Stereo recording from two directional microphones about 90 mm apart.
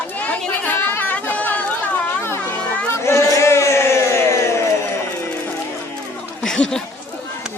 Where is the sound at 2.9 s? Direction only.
30° left (ahead or behind).